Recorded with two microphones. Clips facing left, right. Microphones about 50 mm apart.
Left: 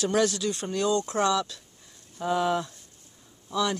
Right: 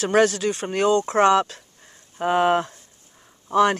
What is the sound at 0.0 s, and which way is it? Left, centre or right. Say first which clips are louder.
Speech: right 6 dB; right.